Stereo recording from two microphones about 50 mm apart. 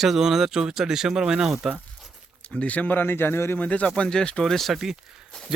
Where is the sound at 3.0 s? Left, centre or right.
Left.